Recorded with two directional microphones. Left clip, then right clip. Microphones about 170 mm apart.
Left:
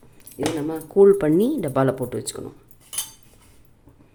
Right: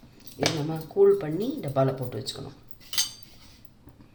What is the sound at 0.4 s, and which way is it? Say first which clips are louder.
Speech: left 3 dB; 60° left (ahead or behind).